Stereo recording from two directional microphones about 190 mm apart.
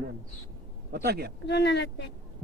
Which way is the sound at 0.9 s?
55° right (ahead or behind).